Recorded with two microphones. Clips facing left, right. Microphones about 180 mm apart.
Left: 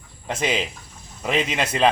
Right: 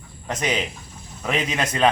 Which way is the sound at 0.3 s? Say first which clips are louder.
Left 1 dB; 25° left (ahead or behind).